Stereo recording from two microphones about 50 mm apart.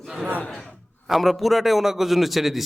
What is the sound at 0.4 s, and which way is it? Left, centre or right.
Speech, centre.